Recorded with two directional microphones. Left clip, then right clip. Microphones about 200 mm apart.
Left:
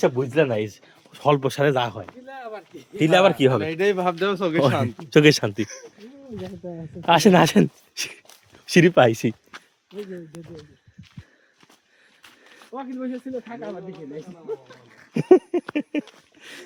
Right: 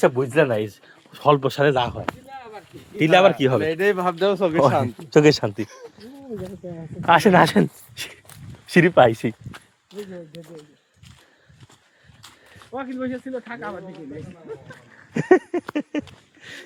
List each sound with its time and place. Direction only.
0.0 s speech: 20° right (ahead or behind)
0.5 s speech: centre (ahead or behind)
3.0 s speech: centre (ahead or behind)
5.0 s speech: 25° left (ahead or behind)
5.5 s speech: 5° left (ahead or behind)
7.0 s speech: 40° left (ahead or behind)
8.6 s speech: 40° left (ahead or behind)
9.5 s a sound: 55° right (ahead or behind)
12.7 s speech: 20° left (ahead or behind)
15.1 s a sound: 20° left (ahead or behind)
15.7 s speech: 15° left (ahead or behind)
16.4 s a sound: 20° left (ahead or behind)